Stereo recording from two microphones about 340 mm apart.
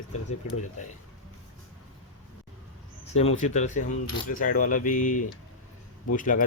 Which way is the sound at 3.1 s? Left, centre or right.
Centre.